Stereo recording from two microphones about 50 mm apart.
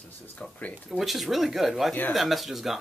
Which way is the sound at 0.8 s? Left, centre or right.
Centre.